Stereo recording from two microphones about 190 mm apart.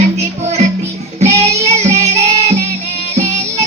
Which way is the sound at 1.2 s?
35° right (ahead or behind).